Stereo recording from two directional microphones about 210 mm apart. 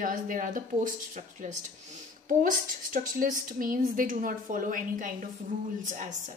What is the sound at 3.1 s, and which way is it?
A woman's voice, 40° right (ahead or behind).